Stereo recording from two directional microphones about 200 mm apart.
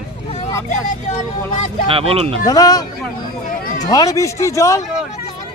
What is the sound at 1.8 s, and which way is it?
Speech, 30° right (ahead or behind).